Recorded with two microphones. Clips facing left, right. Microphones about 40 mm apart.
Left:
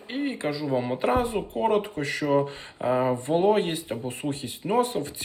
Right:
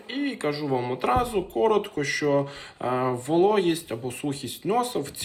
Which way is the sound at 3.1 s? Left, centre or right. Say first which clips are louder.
Right 1 dB; left.